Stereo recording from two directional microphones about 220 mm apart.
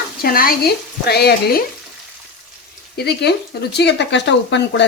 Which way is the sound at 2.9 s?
50° left (ahead or behind).